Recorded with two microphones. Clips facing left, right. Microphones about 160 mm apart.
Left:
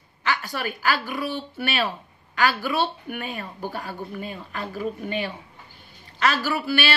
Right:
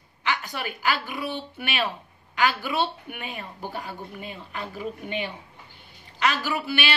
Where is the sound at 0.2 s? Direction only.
20° right (ahead or behind).